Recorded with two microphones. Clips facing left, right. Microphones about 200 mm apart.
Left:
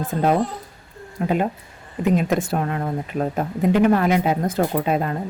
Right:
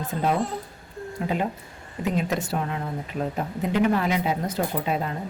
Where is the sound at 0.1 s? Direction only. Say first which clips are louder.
Left 5 dB; 50° left (ahead or behind).